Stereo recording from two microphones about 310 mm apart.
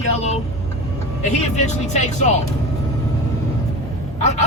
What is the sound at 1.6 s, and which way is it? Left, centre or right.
Speech, left.